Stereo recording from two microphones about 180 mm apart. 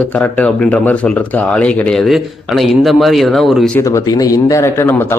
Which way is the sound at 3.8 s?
15° left (ahead or behind).